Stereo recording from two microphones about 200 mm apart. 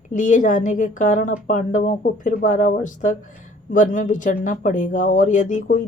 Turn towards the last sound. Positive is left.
turn(degrees=40)  # may be behind; listen again after turning